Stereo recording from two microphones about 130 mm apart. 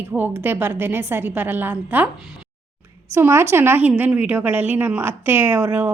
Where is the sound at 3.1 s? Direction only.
20° right (ahead or behind).